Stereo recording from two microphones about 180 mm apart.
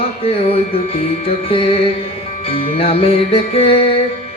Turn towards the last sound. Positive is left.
turn(degrees=30)  # may be behind; listen again after turning